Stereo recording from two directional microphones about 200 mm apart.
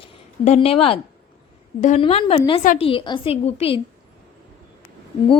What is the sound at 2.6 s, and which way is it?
Speech, 40° left (ahead or behind).